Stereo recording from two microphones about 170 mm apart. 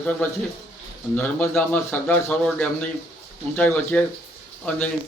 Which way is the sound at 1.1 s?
15° left (ahead or behind).